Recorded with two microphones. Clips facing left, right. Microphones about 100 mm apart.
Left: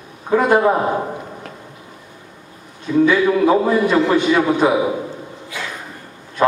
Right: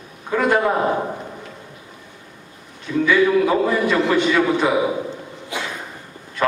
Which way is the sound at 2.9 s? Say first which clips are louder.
Left 2 dB; 15° left (ahead or behind).